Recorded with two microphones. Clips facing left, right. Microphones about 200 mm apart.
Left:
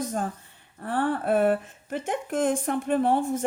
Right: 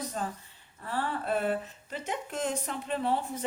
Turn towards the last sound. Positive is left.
turn(degrees=50)  # may be behind; listen again after turning